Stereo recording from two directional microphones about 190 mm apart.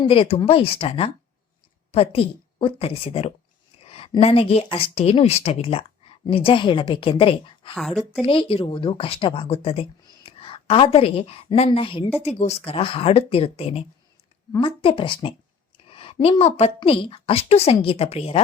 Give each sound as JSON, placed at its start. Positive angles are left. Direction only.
{"t": 0.1, "sound": "a woman's voice", "side_deg": 30}
{"t": 7.8, "sound": "a woman's voice", "side_deg": 0}
{"t": 8.2, "sound": "a woman's voice", "side_deg": 30}